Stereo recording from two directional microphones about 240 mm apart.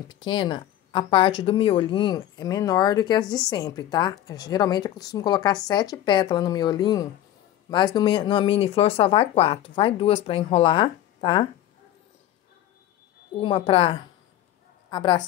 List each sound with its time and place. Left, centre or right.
0.1 s a woman's voice: centre
13.4 s a woman's voice: left